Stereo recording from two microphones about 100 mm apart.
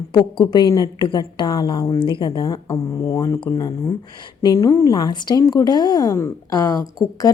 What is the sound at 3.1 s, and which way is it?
Speech, 35° left (ahead or behind).